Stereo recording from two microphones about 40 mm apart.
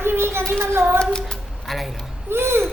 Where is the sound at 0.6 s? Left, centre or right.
Right.